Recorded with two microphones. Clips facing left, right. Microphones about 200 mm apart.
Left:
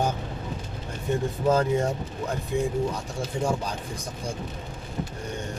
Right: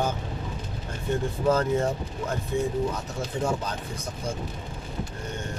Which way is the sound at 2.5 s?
15° left (ahead or behind).